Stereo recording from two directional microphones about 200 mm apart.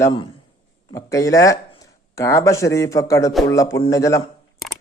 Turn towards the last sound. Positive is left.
turn(degrees=15)  # may be behind; listen again after turning